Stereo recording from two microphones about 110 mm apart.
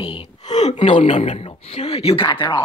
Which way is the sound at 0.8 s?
55° left (ahead or behind).